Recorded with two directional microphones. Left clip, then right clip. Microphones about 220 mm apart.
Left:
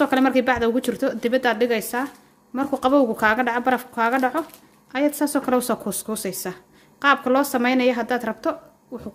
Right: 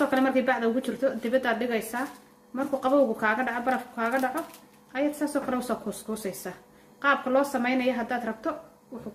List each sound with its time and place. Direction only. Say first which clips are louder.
0.0 s speech: left 5 dB; 45° left (ahead or behind)